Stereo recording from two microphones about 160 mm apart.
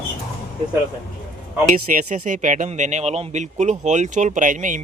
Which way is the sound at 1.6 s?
55° right (ahead or behind).